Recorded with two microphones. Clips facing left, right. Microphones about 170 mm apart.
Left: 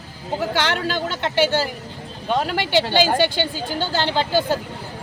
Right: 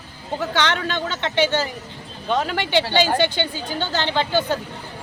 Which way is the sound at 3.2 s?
10° left (ahead or behind).